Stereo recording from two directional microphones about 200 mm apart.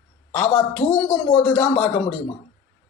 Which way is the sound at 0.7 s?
10° left (ahead or behind).